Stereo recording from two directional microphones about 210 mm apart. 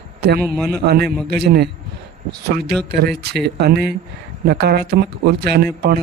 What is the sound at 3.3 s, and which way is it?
A man's voice, 50° right (ahead or behind).